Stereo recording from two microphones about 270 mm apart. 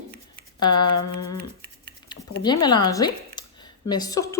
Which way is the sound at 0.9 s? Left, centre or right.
Left.